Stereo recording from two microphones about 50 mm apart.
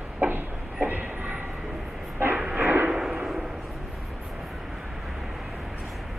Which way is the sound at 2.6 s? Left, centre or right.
Right.